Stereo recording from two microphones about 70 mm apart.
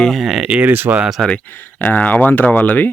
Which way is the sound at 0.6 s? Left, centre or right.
Right.